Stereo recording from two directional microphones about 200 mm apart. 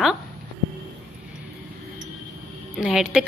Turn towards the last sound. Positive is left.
turn(degrees=-5)  # may be behind; listen again after turning